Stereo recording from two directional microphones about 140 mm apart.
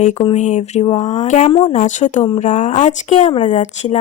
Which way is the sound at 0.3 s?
55° left (ahead or behind).